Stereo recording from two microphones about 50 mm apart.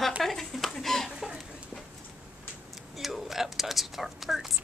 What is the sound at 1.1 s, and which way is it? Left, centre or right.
Chicken, centre.